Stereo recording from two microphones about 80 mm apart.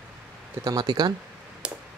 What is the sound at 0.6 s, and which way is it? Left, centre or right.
Speech, right.